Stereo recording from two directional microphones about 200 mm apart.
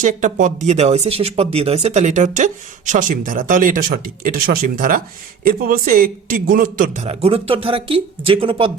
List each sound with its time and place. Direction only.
0.0 s speech: 40° right (ahead or behind)